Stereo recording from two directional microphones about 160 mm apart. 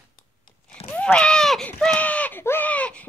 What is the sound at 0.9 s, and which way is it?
Speech, 5° left (ahead or behind).